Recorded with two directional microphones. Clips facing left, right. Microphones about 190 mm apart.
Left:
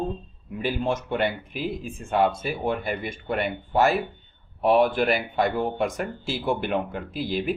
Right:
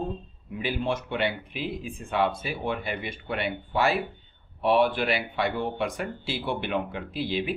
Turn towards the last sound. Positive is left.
turn(degrees=45)  # may be behind; listen again after turning